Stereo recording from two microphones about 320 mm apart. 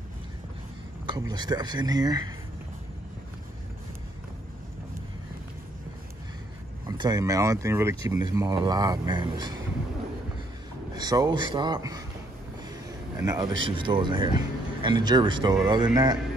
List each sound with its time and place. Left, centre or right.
1.0 s speech: centre
6.9 s speech: centre
11.0 s speech: centre
13.2 s speech: centre